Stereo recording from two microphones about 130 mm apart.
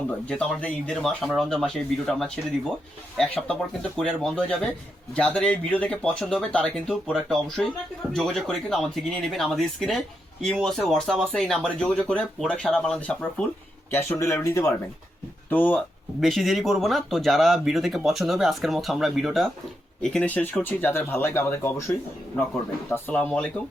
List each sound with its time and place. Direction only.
0.3 s speech: 10° left (ahead or behind)
13.9 s speech: 15° left (ahead or behind)
16.2 s speech: centre (ahead or behind)